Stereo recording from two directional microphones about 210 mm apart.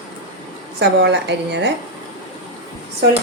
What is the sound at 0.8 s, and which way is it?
Speech, 55° right (ahead or behind).